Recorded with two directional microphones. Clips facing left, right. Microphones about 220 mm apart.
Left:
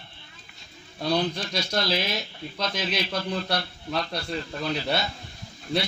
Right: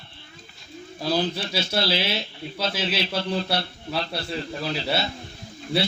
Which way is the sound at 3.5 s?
5° right (ahead or behind).